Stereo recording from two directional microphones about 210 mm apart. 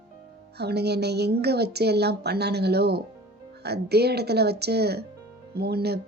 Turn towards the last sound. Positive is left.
turn(degrees=-50)  # may be behind; listen again after turning